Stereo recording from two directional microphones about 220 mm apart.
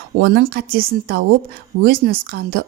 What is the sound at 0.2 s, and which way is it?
A woman's voice, 45° right (ahead or behind).